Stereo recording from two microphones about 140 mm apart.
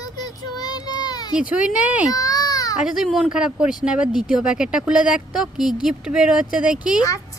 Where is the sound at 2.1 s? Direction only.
25° left (ahead or behind).